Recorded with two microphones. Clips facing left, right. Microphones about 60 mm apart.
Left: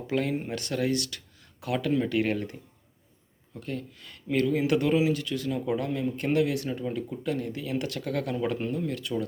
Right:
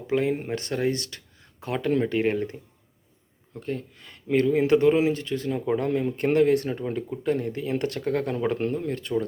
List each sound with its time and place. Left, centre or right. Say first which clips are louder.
0.1 s speech: right 4 dB; right
8.5 s speech: right 3 dB; right